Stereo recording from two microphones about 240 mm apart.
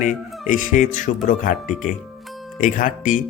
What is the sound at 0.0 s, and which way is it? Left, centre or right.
Speech, left.